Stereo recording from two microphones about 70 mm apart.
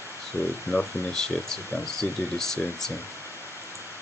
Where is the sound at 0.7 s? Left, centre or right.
Centre.